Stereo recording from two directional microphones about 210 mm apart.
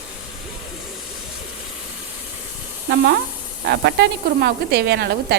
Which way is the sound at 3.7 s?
50° right (ahead or behind).